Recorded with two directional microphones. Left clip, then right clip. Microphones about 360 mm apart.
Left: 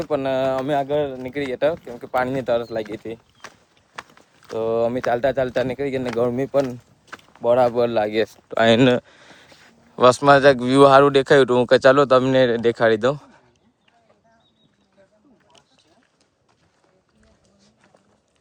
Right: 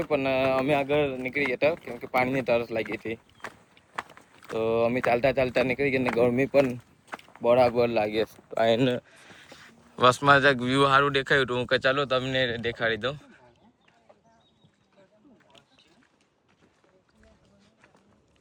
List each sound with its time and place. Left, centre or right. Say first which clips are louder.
0.1 s speech: left 4 dB; centre
4.4 s speech: left 4 dB; centre